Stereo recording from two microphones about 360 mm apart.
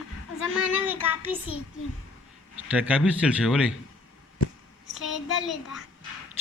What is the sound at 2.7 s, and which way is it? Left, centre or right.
Speech, centre.